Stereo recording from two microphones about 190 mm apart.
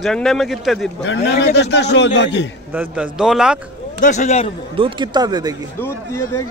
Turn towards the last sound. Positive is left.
turn(degrees=-20)  # may be behind; listen again after turning